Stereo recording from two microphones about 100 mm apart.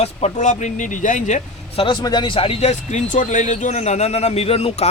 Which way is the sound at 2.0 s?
45° left (ahead or behind).